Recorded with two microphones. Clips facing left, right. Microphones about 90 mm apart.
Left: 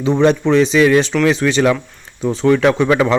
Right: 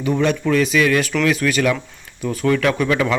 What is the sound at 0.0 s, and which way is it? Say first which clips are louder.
Speech: left 5 dB; 30° left (ahead or behind).